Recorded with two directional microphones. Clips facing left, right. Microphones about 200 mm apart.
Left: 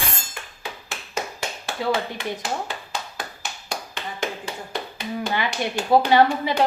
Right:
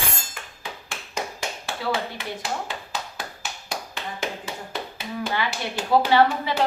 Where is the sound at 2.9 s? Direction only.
5° right (ahead or behind).